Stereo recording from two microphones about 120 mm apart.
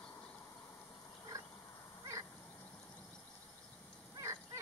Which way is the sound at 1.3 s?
25° right (ahead or behind).